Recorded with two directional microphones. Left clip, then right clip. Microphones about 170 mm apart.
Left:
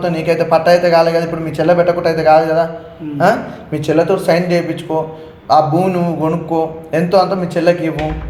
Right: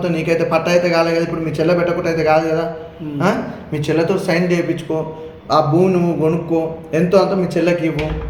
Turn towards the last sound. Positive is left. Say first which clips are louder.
# left 3 dB
turn(degrees=30)  # may be behind; listen again after turning